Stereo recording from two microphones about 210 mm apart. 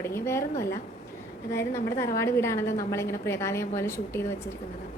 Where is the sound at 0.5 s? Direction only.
45° left (ahead or behind).